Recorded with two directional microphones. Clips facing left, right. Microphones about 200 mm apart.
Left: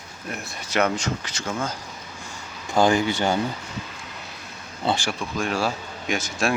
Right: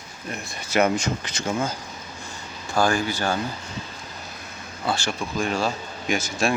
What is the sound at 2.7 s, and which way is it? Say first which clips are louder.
Speech: left 3 dB; 20° left (ahead or behind).